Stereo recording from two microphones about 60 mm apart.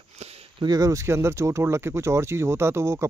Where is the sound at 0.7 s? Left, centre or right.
Right.